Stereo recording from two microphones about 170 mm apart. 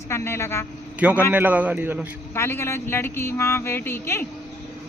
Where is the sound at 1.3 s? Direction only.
10° right (ahead or behind).